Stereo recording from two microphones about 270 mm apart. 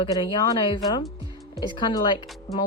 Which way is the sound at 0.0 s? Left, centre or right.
Centre.